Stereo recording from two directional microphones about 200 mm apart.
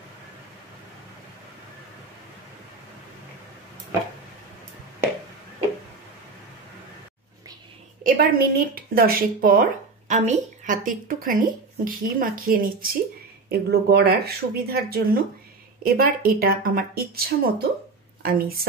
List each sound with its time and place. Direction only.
8.0 s speech: 45° right (ahead or behind)